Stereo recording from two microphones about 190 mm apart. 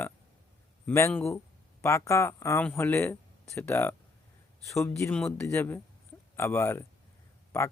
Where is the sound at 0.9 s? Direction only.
10° left (ahead or behind).